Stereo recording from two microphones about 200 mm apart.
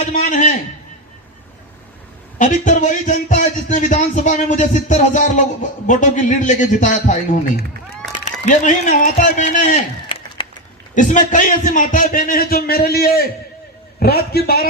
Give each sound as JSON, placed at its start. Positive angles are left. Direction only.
{"t": 0.1, "sound": "a man's voice", "side_deg": 40}
{"t": 2.4, "sound": "a man's voice", "side_deg": 40}
{"t": 10.4, "sound": "a sound", "side_deg": 25}
{"t": 10.9, "sound": "a man's voice", "side_deg": 40}